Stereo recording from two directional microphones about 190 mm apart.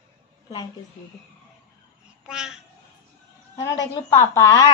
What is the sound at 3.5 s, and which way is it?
Speech, 20° left (ahead or behind).